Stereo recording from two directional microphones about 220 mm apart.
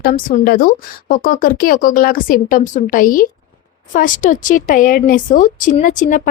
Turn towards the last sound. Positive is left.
turn(degrees=35)  # may be behind; listen again after turning